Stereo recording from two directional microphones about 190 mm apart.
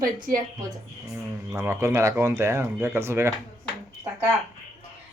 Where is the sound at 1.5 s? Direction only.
15° right (ahead or behind).